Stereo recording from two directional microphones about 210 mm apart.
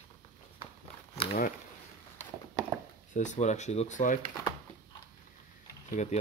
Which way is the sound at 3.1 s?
35° left (ahead or behind).